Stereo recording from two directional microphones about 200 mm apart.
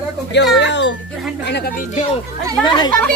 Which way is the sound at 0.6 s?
60° left (ahead or behind).